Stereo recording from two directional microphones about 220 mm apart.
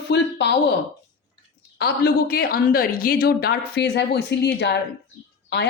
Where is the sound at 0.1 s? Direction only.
50° left (ahead or behind).